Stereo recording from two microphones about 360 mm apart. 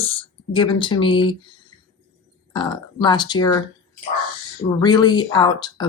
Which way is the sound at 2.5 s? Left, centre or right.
Centre.